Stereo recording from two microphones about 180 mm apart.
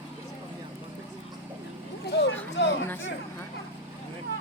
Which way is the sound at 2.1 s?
80° left.